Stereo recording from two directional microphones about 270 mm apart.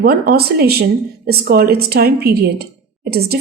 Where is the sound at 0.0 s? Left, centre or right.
Right.